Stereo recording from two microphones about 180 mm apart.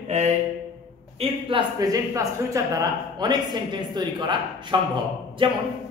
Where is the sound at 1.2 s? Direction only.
25° right (ahead or behind).